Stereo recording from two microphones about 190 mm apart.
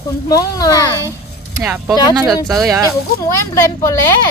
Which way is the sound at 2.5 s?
Centre (ahead or behind).